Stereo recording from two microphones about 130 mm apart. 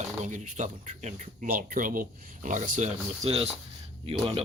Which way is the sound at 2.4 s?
80° right.